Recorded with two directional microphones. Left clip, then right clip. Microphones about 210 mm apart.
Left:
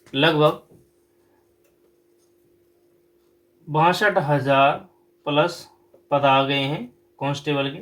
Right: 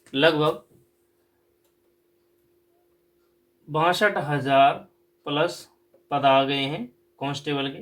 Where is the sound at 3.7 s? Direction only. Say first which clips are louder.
Left 3 dB; 30° right (ahead or behind).